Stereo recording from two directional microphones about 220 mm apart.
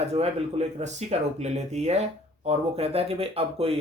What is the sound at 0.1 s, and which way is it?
Speech, 30° right (ahead or behind).